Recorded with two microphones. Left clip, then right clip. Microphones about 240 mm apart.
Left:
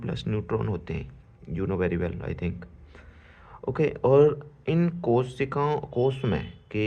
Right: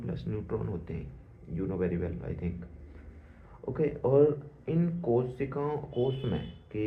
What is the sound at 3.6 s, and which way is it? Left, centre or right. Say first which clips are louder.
Speech: left 6 dB; left.